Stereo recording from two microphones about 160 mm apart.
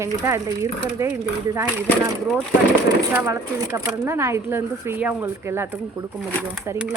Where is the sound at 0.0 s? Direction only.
20° right (ahead or behind).